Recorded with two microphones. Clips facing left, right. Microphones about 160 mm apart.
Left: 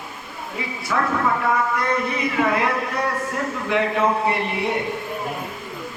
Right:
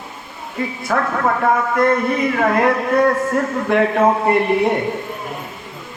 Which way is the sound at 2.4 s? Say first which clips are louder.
Right 3 dB; 50° right (ahead or behind).